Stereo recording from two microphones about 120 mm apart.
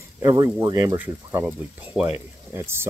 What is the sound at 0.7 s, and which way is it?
Speech, 20° right (ahead or behind).